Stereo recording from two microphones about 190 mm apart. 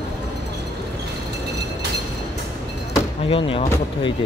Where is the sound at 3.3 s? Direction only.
30° left (ahead or behind).